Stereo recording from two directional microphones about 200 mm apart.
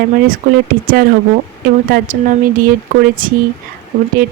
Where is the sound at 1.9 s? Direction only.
40° right (ahead or behind).